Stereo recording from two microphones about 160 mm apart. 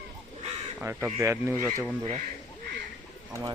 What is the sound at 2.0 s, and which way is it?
Speech, 40° right (ahead or behind).